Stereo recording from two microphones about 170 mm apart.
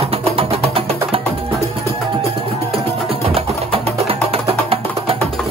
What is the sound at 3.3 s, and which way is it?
Music, 35° right (ahead or behind).